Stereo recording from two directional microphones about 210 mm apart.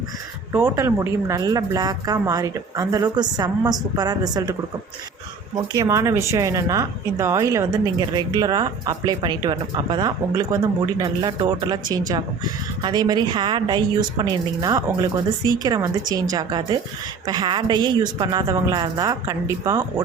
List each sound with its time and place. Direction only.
0.5 s speech: 10° right (ahead or behind)
5.5 s a woman's voice: 15° right (ahead or behind)